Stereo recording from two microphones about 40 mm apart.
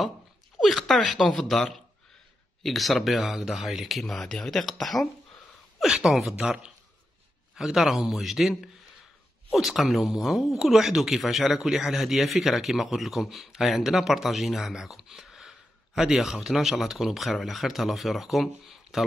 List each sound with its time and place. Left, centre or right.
0.6 s speech: centre
2.6 s speech: centre
3.2 s speech: centre
4.0 s speech: centre
5.8 s speech: centre
7.5 s speech: centre